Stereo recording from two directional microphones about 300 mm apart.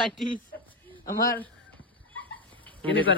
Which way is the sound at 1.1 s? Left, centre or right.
Left.